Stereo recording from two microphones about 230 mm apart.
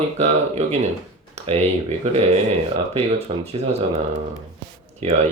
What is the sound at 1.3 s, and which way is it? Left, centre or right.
Computer keyboard, right.